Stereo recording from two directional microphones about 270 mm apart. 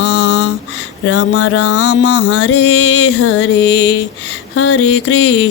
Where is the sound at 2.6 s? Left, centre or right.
Left.